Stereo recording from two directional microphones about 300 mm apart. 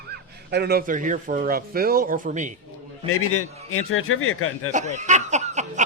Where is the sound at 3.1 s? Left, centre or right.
Left.